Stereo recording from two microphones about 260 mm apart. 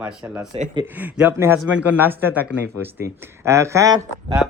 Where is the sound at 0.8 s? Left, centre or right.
Centre.